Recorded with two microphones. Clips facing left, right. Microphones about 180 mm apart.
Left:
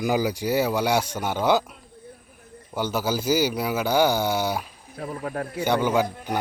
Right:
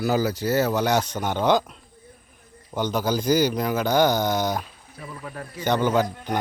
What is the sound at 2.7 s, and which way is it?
Speech, 10° left (ahead or behind).